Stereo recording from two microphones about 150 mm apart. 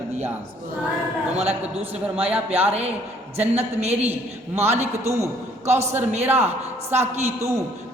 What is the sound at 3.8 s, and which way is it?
A man's voice, 45° right (ahead or behind).